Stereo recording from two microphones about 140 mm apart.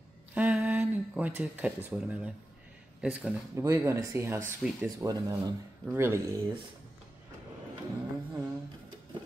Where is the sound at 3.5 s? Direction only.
20° right (ahead or behind).